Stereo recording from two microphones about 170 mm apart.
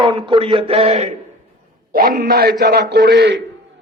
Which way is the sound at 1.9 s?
60° right (ahead or behind).